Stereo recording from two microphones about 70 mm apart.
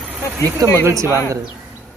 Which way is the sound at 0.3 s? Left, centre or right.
Right.